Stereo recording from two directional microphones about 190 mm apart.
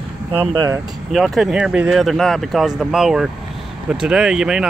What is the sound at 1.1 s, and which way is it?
Speech, centre (ahead or behind).